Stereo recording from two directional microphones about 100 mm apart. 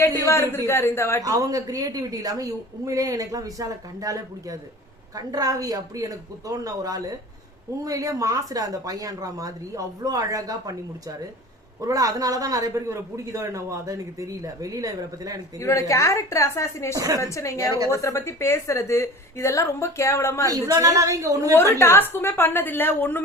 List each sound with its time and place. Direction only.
0.0 s a woman's voice: 25° left (ahead or behind)
1.2 s a man's voice: 35° right (ahead or behind)
15.5 s a woman's voice: 30° left (ahead or behind)
16.9 s a man's voice: 35° right (ahead or behind)
17.2 s a woman's voice: 30° left (ahead or behind)
20.5 s a man's voice: 35° right (ahead or behind)
21.5 s a woman's voice: 25° left (ahead or behind)